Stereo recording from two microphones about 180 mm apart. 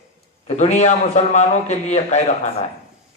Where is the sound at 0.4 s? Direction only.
40° left (ahead or behind).